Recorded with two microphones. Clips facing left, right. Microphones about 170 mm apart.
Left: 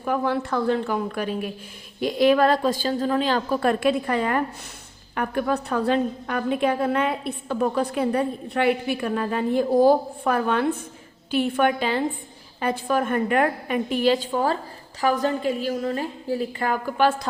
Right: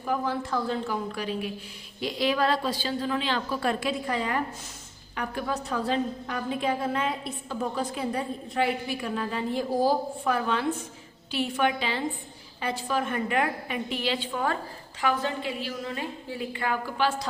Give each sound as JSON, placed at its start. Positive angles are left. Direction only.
{"t": 0.0, "sound": "a woman's voice", "side_deg": 65}